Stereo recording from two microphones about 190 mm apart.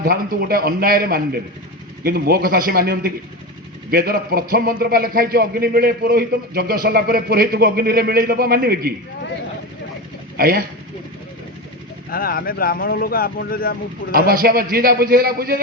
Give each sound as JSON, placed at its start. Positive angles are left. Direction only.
{"t": 0.0, "sound": "a man's voice", "side_deg": -50}
{"t": 10.3, "sound": "speech", "side_deg": -50}
{"t": 12.1, "sound": "speech", "side_deg": 50}
{"t": 14.1, "sound": "a man's voice", "side_deg": -50}